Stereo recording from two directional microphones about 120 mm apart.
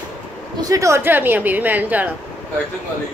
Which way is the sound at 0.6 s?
30° right (ahead or behind).